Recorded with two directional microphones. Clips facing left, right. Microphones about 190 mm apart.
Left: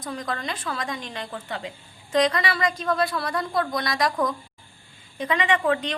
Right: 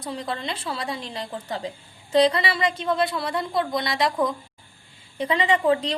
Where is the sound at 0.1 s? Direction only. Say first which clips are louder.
Right 1 dB; 30° right (ahead or behind).